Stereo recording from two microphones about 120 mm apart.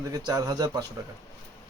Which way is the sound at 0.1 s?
30° right (ahead or behind).